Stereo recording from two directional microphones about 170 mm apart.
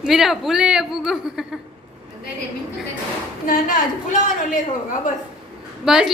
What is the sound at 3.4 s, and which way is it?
A woman's voice, 55° left (ahead or behind).